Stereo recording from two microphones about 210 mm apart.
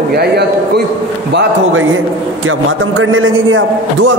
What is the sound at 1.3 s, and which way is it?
A man's voice, 70° right (ahead or behind).